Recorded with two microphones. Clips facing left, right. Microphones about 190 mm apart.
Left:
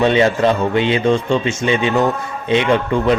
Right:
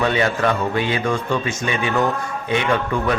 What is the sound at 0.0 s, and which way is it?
Speech, 25° left (ahead or behind).